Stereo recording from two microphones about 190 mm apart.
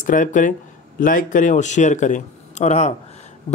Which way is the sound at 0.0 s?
45° left (ahead or behind).